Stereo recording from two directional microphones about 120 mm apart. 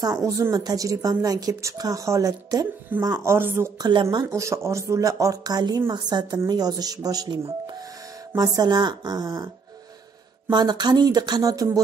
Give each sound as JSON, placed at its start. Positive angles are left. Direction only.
{"t": 0.0, "sound": "speech", "side_deg": -30}
{"t": 3.7, "sound": "speech", "side_deg": -35}
{"t": 4.3, "sound": "speech", "side_deg": -25}
{"t": 8.4, "sound": "speech", "side_deg": -35}
{"t": 10.5, "sound": "speech", "side_deg": -40}